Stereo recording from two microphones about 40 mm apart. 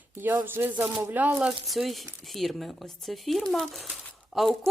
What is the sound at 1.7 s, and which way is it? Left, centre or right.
Speech, centre.